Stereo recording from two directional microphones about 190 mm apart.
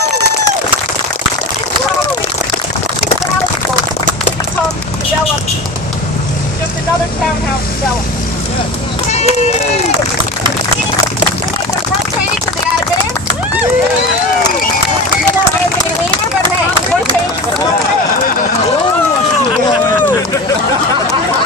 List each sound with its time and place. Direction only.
9.0 s run: 35° left (ahead or behind)